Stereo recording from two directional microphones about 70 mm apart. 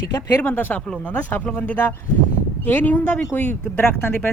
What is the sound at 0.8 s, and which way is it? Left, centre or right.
Speech, centre.